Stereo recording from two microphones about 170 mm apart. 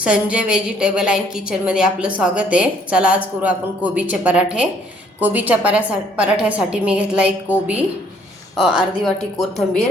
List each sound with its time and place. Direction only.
0.0 s a woman's voice: 5° right (ahead or behind)